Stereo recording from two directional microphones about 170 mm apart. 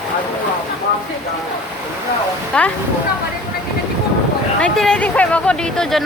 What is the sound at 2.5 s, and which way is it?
Speech, 5° left (ahead or behind).